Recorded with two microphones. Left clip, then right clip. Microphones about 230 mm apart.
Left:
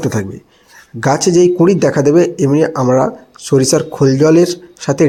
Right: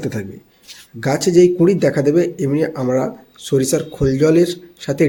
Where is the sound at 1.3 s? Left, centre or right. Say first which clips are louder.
Left 1 dB; centre.